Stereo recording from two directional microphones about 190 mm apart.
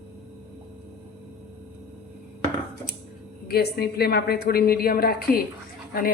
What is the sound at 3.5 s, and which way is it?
A woman's voice, 55° left (ahead or behind).